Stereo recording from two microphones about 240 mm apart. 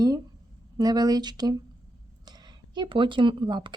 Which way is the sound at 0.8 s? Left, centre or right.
Centre.